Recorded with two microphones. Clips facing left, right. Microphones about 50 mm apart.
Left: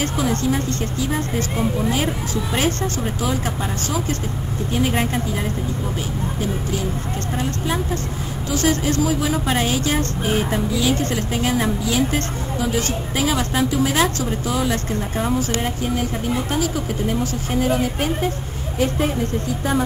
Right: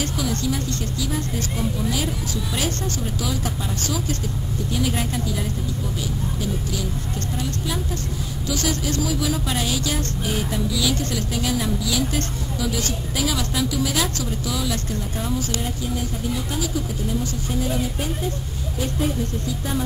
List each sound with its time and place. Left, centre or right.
0.0 s a woman's voice: left
4.7 s a woman's voice: left
7.3 s a woman's voice: left